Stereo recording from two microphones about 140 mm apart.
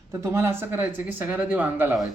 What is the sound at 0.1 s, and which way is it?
Speech, 20° right (ahead or behind).